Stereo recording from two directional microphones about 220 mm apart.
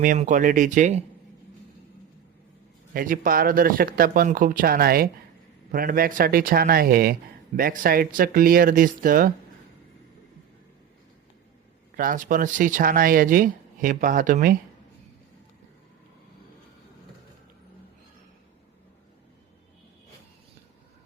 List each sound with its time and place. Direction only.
0.0 s speech: 35° right (ahead or behind)
2.9 s speech: 40° right (ahead or behind)
11.9 s speech: 35° right (ahead or behind)